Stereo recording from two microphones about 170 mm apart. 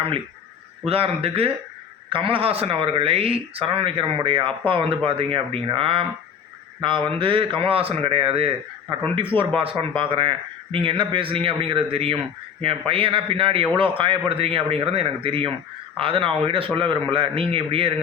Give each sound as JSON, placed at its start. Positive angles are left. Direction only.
{"t": 0.9, "sound": "speech", "side_deg": -35}